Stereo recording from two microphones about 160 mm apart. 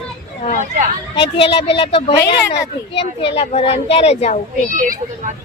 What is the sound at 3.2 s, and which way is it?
Speech, 35° left (ahead or behind).